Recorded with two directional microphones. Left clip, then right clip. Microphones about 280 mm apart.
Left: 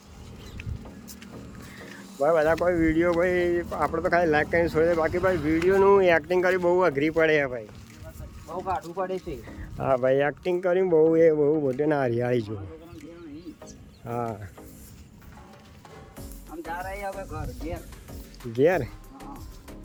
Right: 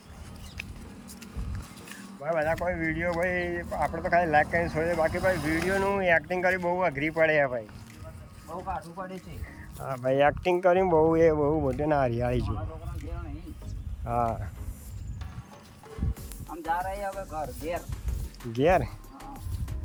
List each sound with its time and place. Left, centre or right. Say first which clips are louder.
2.2 s speech: left 6 dB; centre
8.6 s speech: left 7 dB; left
10.0 s speech: left 1 dB; centre
14.0 s speech: right 3 dB; centre
16.8 s speech: even; centre
18.5 s music: left 1 dB; centre